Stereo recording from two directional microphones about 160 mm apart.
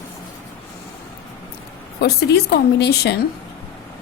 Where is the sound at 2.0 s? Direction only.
90° left.